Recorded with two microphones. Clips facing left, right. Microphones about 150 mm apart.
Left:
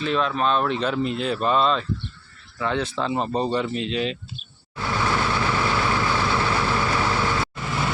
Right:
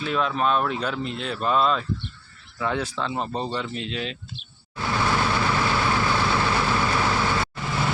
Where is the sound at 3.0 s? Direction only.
5° left (ahead or behind).